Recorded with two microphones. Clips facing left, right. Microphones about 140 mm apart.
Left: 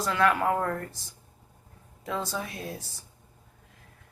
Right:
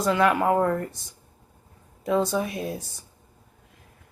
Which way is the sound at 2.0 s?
25° right (ahead or behind).